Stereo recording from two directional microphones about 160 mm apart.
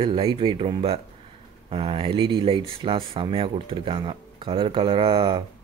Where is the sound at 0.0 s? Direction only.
30° right (ahead or behind).